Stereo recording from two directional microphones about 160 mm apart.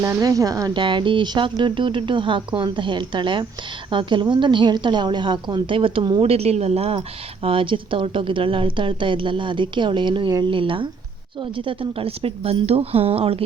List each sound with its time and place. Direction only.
0.0 s speech: 20° right (ahead or behind)
0.8 s a woman's voice: 30° right (ahead or behind)